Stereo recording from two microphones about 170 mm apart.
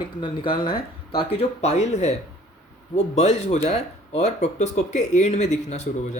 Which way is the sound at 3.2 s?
40° left (ahead or behind).